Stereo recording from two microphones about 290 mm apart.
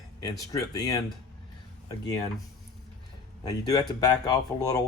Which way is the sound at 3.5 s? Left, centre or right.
Centre.